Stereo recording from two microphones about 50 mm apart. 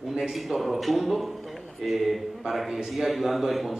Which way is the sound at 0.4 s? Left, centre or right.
Centre.